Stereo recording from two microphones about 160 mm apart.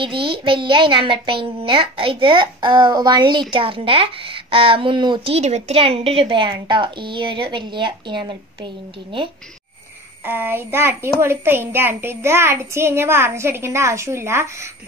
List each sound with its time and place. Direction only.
0.0 s a child's voice: 30° right (ahead or behind)
10.2 s a child's voice: 15° right (ahead or behind)